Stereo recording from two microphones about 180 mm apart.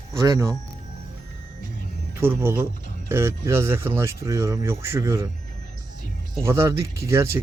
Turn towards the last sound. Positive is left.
turn(degrees=-15)  # may be behind; listen again after turning